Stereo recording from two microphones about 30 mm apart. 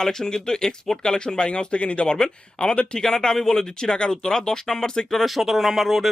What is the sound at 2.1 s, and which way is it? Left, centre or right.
Speech, left.